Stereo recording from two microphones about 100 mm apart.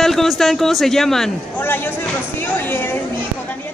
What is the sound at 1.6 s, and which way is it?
A woman's voice, 20° left (ahead or behind).